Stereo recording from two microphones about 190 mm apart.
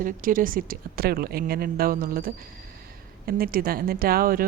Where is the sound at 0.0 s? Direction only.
45° right (ahead or behind).